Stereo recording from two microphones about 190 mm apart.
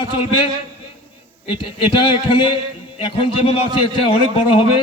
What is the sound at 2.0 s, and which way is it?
A man's voice, 25° left (ahead or behind).